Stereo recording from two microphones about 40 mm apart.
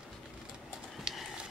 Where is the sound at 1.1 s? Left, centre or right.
Right.